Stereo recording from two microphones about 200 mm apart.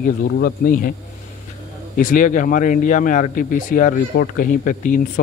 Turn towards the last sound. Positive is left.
turn(degrees=40)  # may be behind; listen again after turning